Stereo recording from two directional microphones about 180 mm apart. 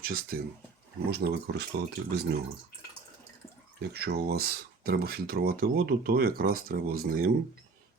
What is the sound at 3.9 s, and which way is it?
Speech, 65° right (ahead or behind).